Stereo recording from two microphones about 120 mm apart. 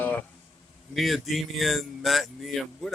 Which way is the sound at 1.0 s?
Centre (ahead or behind).